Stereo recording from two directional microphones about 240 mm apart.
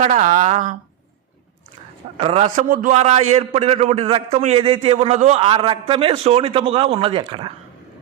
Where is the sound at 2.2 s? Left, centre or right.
Right.